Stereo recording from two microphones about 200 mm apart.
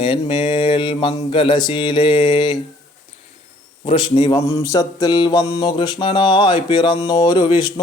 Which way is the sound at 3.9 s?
25° left (ahead or behind).